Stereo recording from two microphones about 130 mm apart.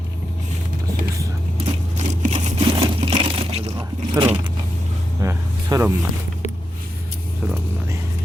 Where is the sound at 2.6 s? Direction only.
45° right (ahead or behind).